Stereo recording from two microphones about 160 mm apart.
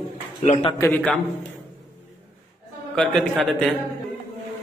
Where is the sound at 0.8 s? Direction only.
10° left (ahead or behind).